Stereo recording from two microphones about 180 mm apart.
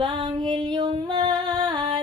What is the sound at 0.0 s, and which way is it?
Music, 25° right (ahead or behind).